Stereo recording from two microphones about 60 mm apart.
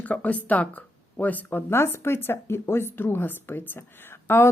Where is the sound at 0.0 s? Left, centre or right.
Left.